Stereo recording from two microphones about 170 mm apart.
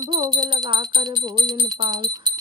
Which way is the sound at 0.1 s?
25° right (ahead or behind).